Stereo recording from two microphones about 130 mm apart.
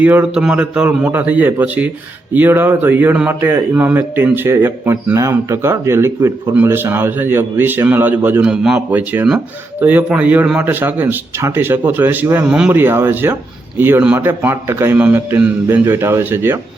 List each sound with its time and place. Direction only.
0.0 s speech: 10° right (ahead or behind)